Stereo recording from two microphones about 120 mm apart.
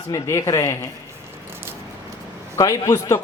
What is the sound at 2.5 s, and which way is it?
Speech, 30° left (ahead or behind).